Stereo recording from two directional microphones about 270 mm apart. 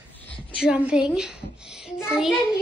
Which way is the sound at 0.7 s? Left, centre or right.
Centre.